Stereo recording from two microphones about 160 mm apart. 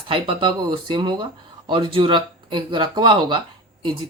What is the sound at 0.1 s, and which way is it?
Speech, 30° right (ahead or behind).